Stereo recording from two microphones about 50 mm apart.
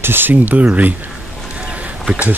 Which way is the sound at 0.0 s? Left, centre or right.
Right.